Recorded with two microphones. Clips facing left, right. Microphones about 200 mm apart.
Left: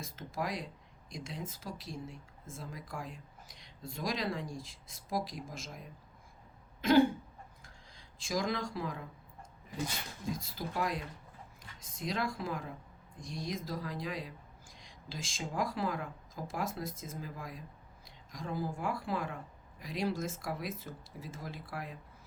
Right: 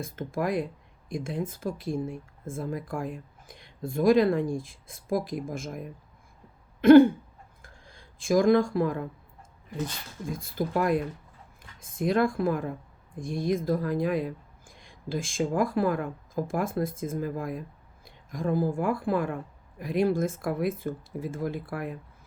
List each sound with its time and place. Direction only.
0.0 s speech: 55° right (ahead or behind)
6.8 s throat clearing: 55° right (ahead or behind)
7.6 s a sound: 55° right (ahead or behind)
10.2 s speech: 55° right (ahead or behind)